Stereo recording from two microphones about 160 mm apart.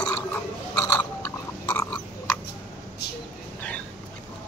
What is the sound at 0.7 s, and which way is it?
Chewing, 25° left (ahead or behind).